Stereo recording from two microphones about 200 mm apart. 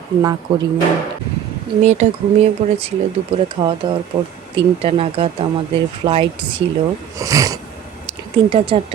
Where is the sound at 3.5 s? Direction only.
25° right (ahead or behind).